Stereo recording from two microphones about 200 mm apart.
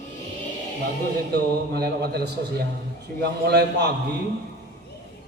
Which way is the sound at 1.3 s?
50° right (ahead or behind).